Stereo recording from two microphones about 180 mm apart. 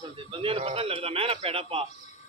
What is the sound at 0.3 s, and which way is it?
Speech, 30° right (ahead or behind).